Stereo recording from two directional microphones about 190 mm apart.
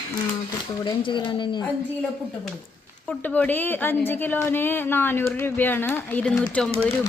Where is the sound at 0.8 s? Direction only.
25° left (ahead or behind).